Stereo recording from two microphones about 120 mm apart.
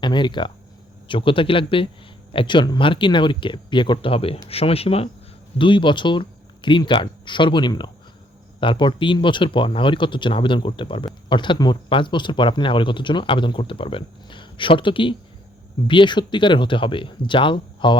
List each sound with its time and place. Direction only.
0.0 s speech: 40° left (ahead or behind); by 5.0 s 55° left (ahead or behind)
5.5 s speech: 45° left (ahead or behind)